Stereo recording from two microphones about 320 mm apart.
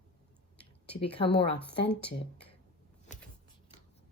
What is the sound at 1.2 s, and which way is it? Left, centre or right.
Speech, centre.